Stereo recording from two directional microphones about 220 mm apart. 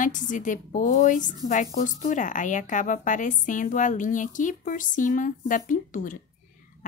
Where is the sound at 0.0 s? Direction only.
35° left (ahead or behind).